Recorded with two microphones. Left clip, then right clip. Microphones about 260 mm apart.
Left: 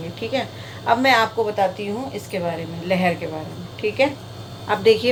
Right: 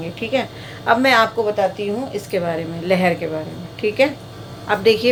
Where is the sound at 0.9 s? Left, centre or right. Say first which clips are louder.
Right 2 dB; centre.